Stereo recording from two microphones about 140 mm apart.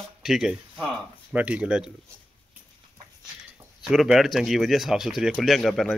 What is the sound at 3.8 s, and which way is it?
Speech, 5° right (ahead or behind).